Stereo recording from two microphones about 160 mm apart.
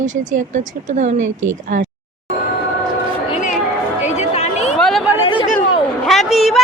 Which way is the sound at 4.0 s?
45° left (ahead or behind).